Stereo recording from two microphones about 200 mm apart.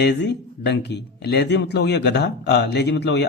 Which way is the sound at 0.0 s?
60° left (ahead or behind).